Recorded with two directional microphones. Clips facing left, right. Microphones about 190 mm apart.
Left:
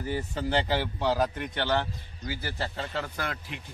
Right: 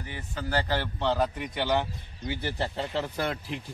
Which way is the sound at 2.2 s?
20° right (ahead or behind).